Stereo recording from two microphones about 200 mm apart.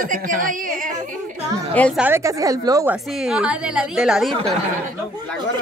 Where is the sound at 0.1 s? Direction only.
45° right (ahead or behind).